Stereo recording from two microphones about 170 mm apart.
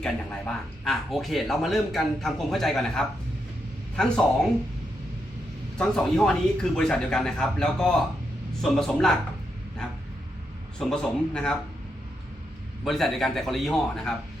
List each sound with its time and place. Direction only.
0.0 s speech: 5° left (ahead or behind)
5.7 s speech: 5° left (ahead or behind)
10.8 s speech: 5° left (ahead or behind)
12.8 s speech: centre (ahead or behind)